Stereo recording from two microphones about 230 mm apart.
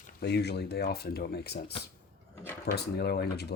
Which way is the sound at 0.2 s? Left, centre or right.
Left.